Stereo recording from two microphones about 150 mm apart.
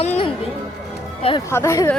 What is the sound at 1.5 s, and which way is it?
Speech, 20° left (ahead or behind).